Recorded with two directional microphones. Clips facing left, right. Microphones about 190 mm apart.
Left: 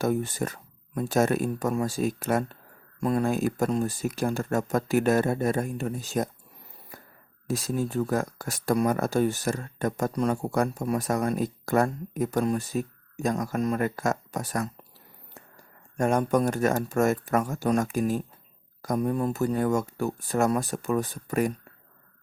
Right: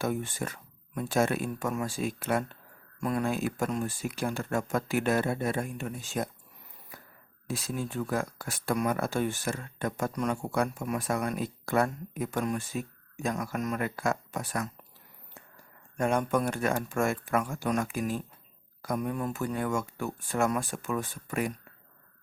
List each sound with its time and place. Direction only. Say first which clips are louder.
0.0 s speech: left 5 dB; 40° left (ahead or behind)
7.4 s speech: left 6 dB; 40° left (ahead or behind)